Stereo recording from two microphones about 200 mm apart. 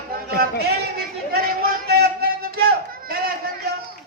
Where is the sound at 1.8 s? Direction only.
50° right (ahead or behind).